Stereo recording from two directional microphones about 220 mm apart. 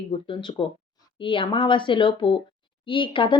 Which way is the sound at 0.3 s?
25° left (ahead or behind).